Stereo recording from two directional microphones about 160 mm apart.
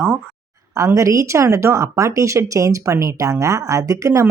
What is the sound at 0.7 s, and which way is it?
A woman's voice, 20° right (ahead or behind).